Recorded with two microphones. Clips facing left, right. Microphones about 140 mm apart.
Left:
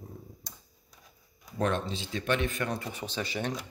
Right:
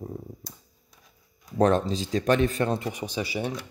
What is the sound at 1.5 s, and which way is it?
Speech, 35° right (ahead or behind).